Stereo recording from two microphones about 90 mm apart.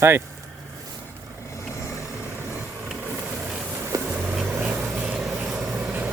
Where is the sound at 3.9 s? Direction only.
40° right (ahead or behind).